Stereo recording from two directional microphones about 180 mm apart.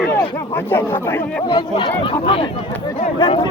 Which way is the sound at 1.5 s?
25° left (ahead or behind).